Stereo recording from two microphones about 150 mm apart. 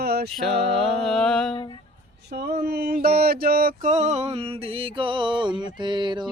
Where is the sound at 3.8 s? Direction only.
45° right (ahead or behind); by 6.2 s 30° right (ahead or behind).